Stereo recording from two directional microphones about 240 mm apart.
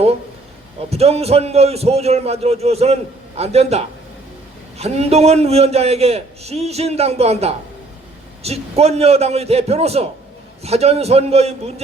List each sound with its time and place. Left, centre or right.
0.9 s a man's voice: right